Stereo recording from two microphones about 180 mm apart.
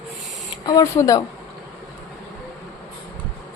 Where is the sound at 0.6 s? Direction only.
20° left (ahead or behind).